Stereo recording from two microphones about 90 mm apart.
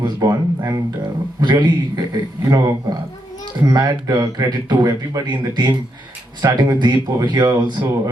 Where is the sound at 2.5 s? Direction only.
40° right (ahead or behind).